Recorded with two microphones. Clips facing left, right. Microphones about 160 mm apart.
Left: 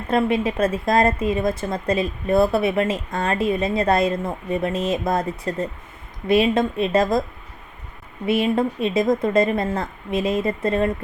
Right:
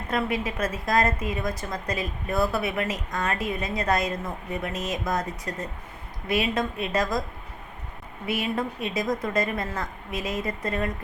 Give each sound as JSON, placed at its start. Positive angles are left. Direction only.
{"t": 0.1, "sound": "a woman's voice", "side_deg": 25}
{"t": 8.3, "sound": "a woman's voice", "side_deg": 25}